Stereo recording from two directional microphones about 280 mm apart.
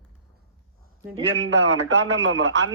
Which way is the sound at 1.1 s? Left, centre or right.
Right.